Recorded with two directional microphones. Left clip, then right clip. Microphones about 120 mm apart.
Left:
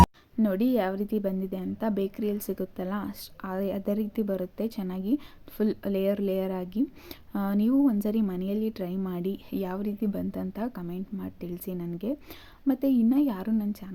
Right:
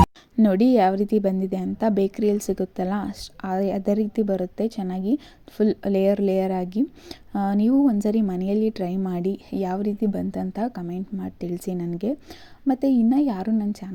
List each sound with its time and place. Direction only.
0.3 s a woman's voice: 45° right (ahead or behind)
12.6 s a woman's voice: 25° right (ahead or behind)